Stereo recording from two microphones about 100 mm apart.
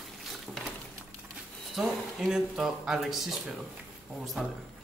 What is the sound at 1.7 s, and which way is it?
Speech, 5° right (ahead or behind).